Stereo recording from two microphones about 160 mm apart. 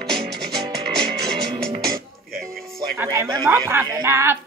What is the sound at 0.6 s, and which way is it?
Music, 30° right (ahead or behind).